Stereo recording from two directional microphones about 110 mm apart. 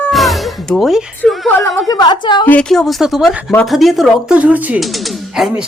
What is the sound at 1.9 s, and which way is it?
Speech, 40° left (ahead or behind).